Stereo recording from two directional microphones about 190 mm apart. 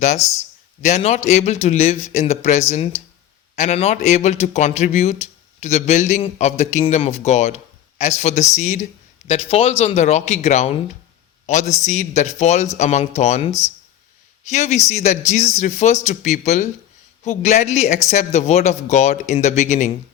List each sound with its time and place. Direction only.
0.0 s a man's voice: 35° left (ahead or behind)